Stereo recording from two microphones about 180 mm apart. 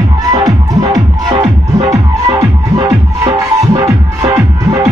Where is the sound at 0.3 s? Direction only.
20° right (ahead or behind).